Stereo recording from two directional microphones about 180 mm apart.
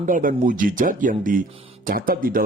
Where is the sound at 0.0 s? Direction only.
50° right (ahead or behind).